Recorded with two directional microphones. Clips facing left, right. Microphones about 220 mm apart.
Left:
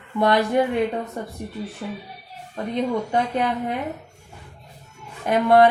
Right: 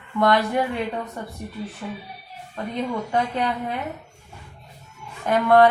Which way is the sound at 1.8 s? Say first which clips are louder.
Left 2 dB; 35° left (ahead or behind).